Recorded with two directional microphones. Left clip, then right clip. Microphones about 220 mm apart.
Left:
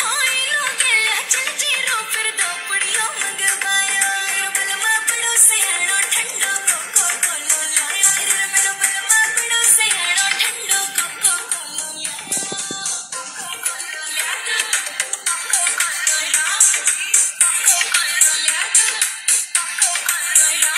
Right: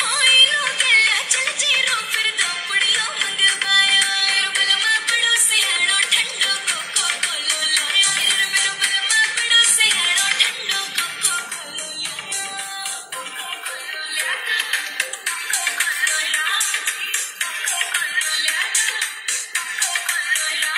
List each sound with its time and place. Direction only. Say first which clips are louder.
0.0 s music: right 5 dB; 50° left (ahead or behind)
14.1 s music: even; 50° left (ahead or behind)